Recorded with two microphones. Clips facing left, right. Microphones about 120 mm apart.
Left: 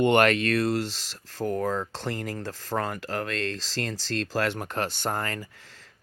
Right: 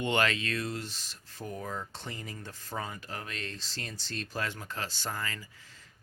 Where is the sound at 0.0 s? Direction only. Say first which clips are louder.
Left 9 dB; 60° left (ahead or behind).